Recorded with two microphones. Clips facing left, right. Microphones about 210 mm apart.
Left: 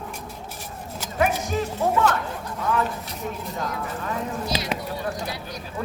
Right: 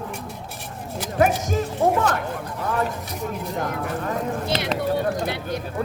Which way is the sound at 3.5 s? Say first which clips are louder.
Right 4 dB; 55° right (ahead or behind).